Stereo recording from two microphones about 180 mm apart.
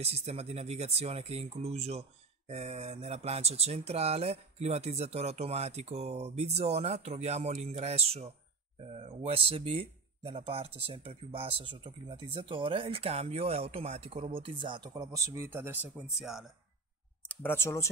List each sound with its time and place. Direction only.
0.0 s speech: 35° right (ahead or behind); by 16.4 s 5° right (ahead or behind)
17.3 s speech: 10° left (ahead or behind)